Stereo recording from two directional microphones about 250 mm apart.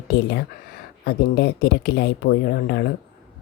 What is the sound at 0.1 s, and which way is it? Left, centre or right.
Speech, left.